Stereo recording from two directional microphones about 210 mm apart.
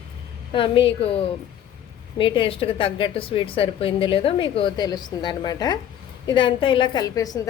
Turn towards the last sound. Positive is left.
turn(degrees=15)  # may be behind; listen again after turning